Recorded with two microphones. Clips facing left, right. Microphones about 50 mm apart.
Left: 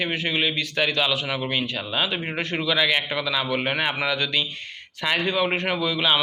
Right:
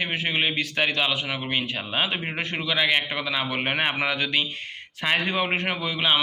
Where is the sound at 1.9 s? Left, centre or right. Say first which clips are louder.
Even; right.